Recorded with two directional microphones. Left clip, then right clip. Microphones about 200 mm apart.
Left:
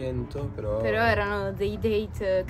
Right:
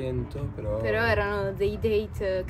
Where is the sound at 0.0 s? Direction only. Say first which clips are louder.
Left 1 dB; 15° left (ahead or behind).